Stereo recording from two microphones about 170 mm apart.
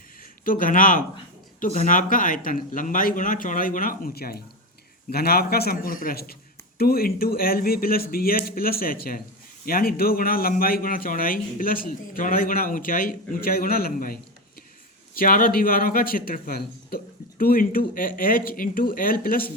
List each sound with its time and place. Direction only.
0.4 s a man's voice: 55° left (ahead or behind)